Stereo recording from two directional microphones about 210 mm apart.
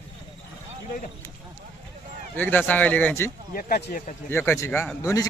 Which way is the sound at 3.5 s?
40° left (ahead or behind).